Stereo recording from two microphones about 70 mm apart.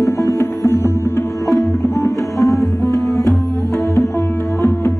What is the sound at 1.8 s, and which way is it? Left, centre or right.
Tabla, left.